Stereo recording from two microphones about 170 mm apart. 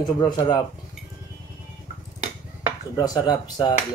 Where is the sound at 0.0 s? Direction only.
25° left (ahead or behind).